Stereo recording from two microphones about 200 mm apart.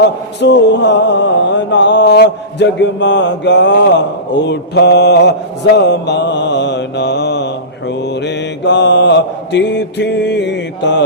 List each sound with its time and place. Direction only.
0.3 s mantra: 60° left (ahead or behind)